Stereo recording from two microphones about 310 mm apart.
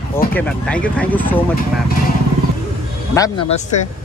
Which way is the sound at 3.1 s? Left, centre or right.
Centre.